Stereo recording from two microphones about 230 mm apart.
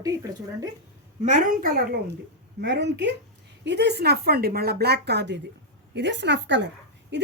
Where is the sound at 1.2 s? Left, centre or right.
Right.